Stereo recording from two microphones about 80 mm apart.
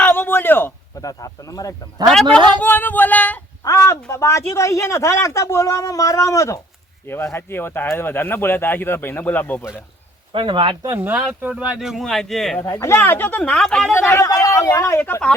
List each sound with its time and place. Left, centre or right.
0.0 s a sound: left
1.0 s speech: left
2.6 s speech: left
3.6 s a sound: left
4.1 s speech: left
7.3 s speech: left
10.4 s speech: right
10.8 s speech: right; by 12.5 s centre
12.6 s speech: left
13.4 s speech: centre
13.9 s speech: left
14.3 s speech: left